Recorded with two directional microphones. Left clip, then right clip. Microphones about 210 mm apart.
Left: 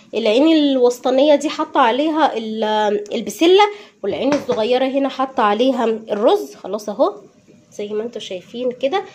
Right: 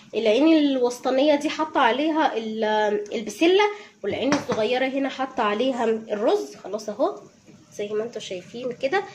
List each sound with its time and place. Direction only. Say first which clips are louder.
0.1 s a woman's voice: left 4 dB; 35° left (ahead or behind)